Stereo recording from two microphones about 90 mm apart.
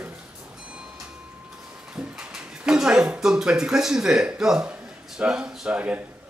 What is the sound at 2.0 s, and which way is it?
A man's voice, 5° right (ahead or behind).